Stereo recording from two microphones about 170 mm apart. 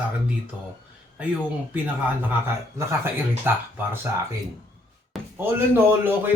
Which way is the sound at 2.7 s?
15° right (ahead or behind).